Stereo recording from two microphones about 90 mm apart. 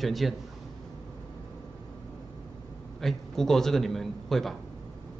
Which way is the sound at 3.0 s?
5° left (ahead or behind).